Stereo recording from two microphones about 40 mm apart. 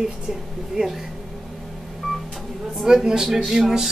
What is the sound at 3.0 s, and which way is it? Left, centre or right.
Speech, centre.